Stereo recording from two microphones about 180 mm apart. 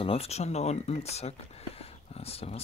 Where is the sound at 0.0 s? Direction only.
35° left (ahead or behind).